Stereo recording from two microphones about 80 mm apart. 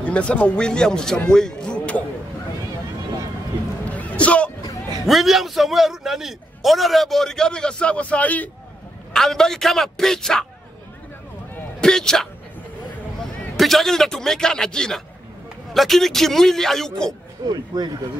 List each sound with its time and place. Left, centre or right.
0.0 s speech: centre
3.8 s music: centre
5.0 s a man's voice: centre
9.1 s a man's voice: centre
11.8 s a man's voice: centre
17.5 s speech: right